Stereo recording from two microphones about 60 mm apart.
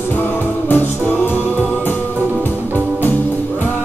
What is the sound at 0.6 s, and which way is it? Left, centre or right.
Music, left.